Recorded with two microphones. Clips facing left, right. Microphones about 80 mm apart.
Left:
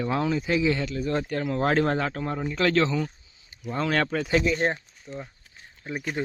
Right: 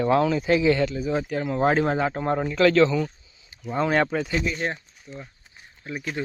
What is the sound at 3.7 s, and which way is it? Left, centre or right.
Speech, centre.